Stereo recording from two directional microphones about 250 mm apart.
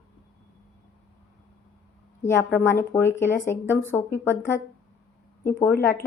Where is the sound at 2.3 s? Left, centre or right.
Centre.